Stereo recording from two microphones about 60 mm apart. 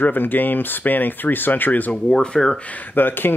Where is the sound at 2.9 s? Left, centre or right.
Left.